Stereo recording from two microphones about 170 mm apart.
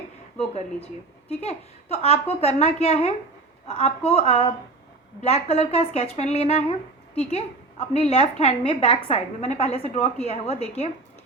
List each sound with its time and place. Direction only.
0.3 s a woman's voice: 35° left (ahead or behind)
5.2 s a woman's voice: 35° left (ahead or behind)